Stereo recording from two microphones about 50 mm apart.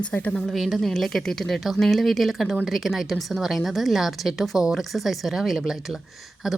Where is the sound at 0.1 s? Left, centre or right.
Left.